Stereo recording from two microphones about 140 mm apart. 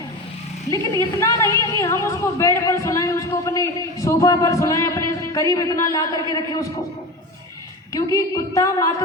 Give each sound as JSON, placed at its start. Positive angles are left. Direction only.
{"t": 0.7, "sound": "a woman's voice", "side_deg": 25}
{"t": 7.9, "sound": "a woman's voice", "side_deg": 25}